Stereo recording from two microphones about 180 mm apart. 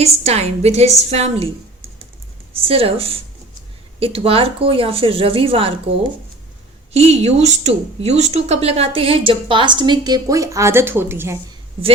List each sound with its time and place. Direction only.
0.0 s speech: 35° right (ahead or behind)
2.6 s speech: 30° right (ahead or behind)
6.9 s speech: 35° right (ahead or behind); by 11.3 s 10° right (ahead or behind)